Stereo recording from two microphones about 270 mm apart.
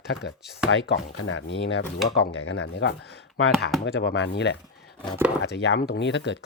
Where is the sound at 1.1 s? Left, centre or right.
Left.